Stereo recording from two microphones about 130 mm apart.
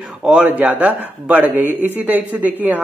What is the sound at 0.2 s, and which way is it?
Speech, 10° right (ahead or behind).